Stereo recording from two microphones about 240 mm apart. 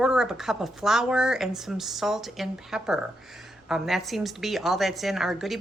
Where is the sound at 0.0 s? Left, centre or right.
Centre.